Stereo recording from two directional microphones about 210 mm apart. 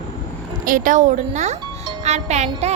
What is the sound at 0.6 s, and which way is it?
A woman's voice, 40° right (ahead or behind).